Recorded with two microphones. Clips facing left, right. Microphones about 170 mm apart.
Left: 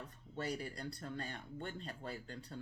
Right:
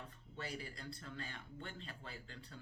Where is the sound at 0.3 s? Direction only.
40° left (ahead or behind).